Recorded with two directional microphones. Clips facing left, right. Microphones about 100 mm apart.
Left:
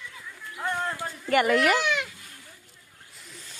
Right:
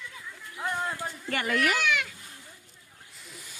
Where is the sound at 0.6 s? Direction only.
10° right (ahead or behind).